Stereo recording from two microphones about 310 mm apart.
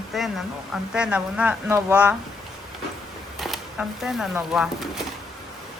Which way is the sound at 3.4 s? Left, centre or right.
Centre.